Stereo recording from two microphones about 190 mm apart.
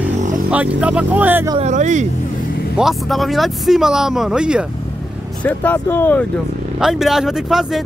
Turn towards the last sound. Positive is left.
turn(degrees=0)  # may be behind; listen again after turning